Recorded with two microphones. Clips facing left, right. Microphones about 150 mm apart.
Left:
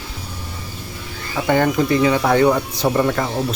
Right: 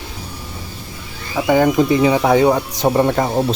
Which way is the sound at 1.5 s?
10° right (ahead or behind).